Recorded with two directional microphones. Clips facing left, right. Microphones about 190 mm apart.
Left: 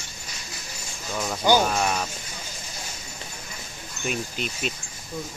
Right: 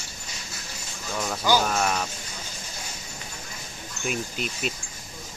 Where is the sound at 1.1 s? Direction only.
5° left (ahead or behind).